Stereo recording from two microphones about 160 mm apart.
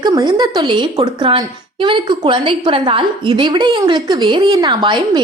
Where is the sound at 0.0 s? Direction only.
25° right (ahead or behind).